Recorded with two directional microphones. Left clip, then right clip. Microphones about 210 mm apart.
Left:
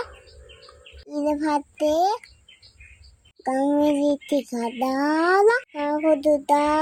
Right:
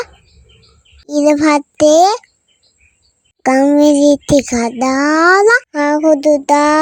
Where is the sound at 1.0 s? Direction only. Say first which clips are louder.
Right 13 dB; 40° right (ahead or behind).